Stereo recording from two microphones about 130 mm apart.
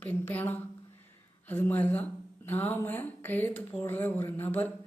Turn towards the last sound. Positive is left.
turn(degrees=15)  # may be behind; listen again after turning